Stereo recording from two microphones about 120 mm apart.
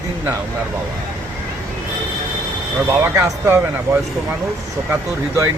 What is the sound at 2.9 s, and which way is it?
Speech, 20° right (ahead or behind).